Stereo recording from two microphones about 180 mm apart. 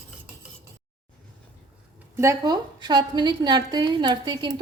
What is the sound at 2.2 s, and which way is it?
A woman's voice, 20° right (ahead or behind).